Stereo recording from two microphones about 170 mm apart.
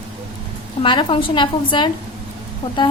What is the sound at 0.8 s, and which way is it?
A woman's voice, 30° left (ahead or behind).